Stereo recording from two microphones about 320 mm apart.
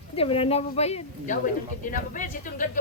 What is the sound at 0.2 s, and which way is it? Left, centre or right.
Speech, centre.